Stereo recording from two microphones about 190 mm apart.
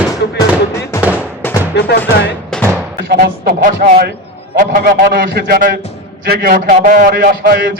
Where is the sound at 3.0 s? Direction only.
50° right (ahead or behind).